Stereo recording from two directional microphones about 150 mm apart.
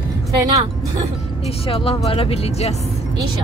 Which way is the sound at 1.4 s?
40° left (ahead or behind).